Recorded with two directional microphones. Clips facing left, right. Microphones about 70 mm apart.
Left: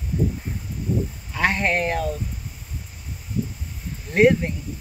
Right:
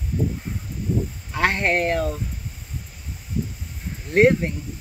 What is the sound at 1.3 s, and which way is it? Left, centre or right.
Speech, right.